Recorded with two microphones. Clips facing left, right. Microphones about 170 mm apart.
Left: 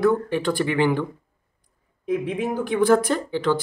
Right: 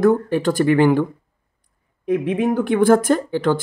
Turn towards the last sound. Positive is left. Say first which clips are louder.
# right 4 dB
turn(degrees=-50)  # may be behind; listen again after turning